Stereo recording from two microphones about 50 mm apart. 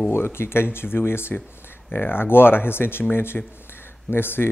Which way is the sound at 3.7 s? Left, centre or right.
Left.